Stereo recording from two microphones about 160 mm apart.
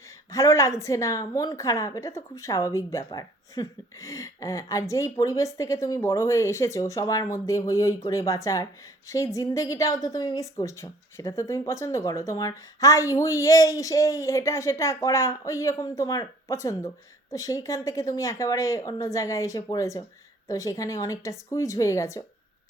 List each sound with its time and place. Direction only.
0.3 s a woman's voice: 20° left (ahead or behind)